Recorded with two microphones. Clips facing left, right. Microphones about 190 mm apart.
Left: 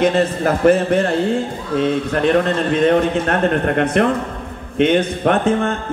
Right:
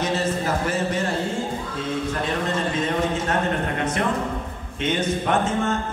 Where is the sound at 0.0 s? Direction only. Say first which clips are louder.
Left 8 dB; 60° left (ahead or behind).